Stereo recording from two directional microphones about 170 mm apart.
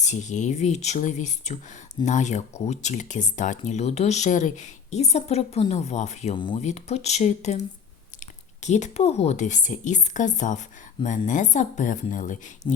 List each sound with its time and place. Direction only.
0.0 s speech: 45° left (ahead or behind)
6.3 s speech: 30° left (ahead or behind)
6.6 s speech: 40° left (ahead or behind)
12.7 s speech: 30° left (ahead or behind)